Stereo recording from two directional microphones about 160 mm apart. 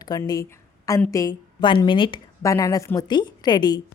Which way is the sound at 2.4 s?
20° left (ahead or behind).